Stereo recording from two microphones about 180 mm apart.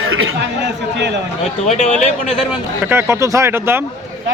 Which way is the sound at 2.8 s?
15° right (ahead or behind).